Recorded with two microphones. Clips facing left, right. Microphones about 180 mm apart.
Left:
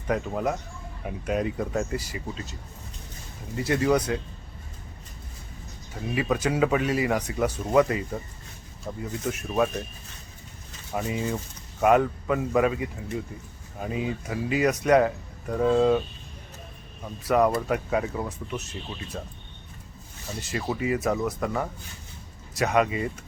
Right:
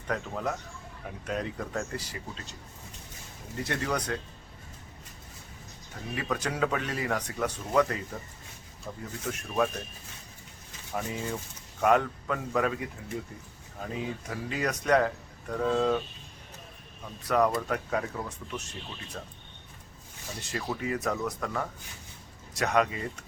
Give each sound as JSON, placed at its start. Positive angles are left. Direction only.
{"t": 0.1, "sound": "speech", "side_deg": 15}
{"t": 3.6, "sound": "speech", "side_deg": 5}
{"t": 6.1, "sound": "speech", "side_deg": 10}
{"t": 9.2, "sound": "speech", "side_deg": 5}
{"t": 10.9, "sound": "speech", "side_deg": 10}
{"t": 17.2, "sound": "speech", "side_deg": 10}
{"t": 20.4, "sound": "speech", "side_deg": 5}